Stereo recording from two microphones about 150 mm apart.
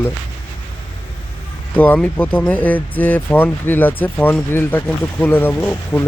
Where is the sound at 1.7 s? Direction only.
10° left (ahead or behind).